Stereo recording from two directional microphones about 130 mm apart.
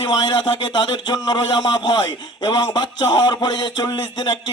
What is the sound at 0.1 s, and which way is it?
Speech, 35° left (ahead or behind).